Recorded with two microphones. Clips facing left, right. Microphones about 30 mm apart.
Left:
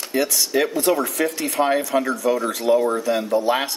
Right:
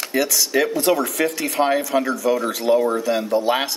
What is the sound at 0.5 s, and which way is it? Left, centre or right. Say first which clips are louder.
Speech: right 1 dB; right.